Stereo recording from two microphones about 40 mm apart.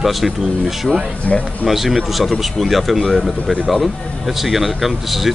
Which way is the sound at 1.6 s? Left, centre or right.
Centre.